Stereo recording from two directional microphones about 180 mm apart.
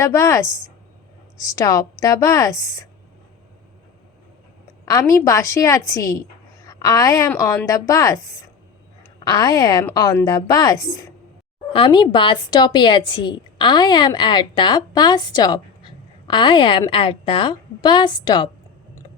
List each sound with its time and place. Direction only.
0.0 s a woman's voice: 15° left (ahead or behind)
4.9 s a woman's voice: 20° left (ahead or behind)